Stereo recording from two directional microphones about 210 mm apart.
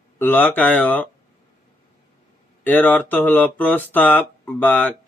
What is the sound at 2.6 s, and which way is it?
Speech, 10° left (ahead or behind).